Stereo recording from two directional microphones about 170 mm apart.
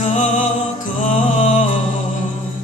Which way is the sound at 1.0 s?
45° left (ahead or behind).